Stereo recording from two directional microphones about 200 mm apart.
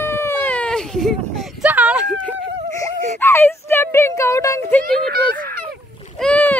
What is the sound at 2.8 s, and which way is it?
A child's voice, 10° left (ahead or behind).